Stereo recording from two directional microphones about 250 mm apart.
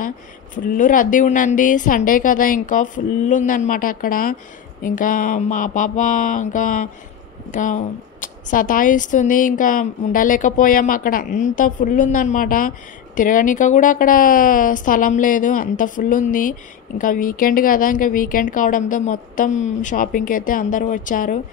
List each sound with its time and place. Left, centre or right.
0.7 s speech: left